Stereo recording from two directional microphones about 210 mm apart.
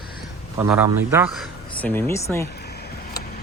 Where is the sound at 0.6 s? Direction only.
10° right (ahead or behind).